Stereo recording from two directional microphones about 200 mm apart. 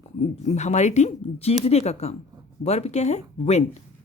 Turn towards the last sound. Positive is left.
turn(degrees=35)  # may be behind; listen again after turning